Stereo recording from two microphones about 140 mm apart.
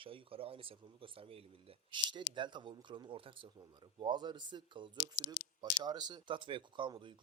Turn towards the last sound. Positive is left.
turn(degrees=-35)  # may be behind; listen again after turning